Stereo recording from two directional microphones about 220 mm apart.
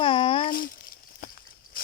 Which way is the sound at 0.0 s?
20° left (ahead or behind).